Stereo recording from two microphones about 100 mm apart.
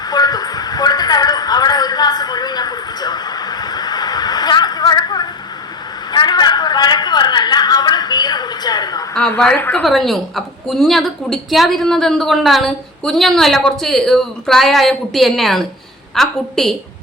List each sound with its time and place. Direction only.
0.1 s a sound: 40° left (ahead or behind)
9.6 s a woman's voice: 20° left (ahead or behind)
9.8 s a woman's voice: centre (ahead or behind)